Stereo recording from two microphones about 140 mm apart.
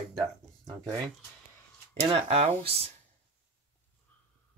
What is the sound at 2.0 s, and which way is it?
Speech, 45° right (ahead or behind).